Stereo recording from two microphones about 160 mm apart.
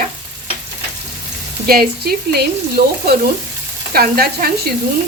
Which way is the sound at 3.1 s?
80° right.